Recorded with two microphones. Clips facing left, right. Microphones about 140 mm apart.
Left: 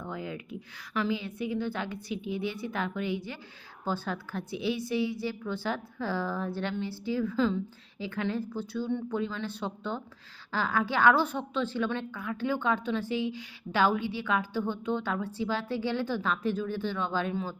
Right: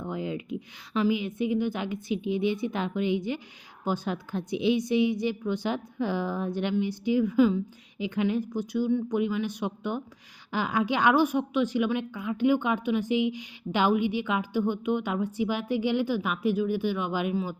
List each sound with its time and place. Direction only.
0.0 s a woman's voice: 20° right (ahead or behind)